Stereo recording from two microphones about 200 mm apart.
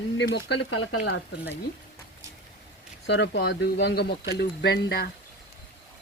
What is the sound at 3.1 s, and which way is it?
Speech, 60° left (ahead or behind).